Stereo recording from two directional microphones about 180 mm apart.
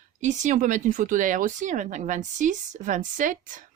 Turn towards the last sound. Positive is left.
turn(degrees=-45)  # may be behind; listen again after turning